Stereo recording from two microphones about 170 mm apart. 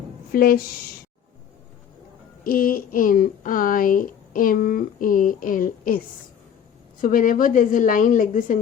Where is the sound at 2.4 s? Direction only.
55° left (ahead or behind).